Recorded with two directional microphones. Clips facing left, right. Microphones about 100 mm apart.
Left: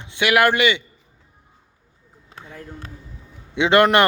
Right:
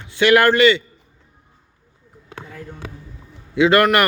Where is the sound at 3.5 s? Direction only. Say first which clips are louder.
Right 1 dB; 25° left (ahead or behind).